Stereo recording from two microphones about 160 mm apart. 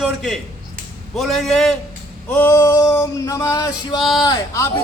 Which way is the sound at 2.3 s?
15° left (ahead or behind).